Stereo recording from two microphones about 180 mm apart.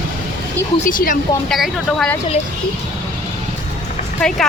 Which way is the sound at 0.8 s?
50° left (ahead or behind).